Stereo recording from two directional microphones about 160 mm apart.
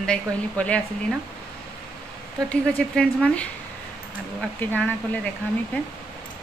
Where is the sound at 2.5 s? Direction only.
5° left (ahead or behind).